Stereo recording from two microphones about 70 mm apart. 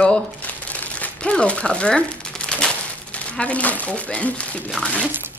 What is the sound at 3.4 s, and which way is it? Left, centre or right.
A woman's voice, centre.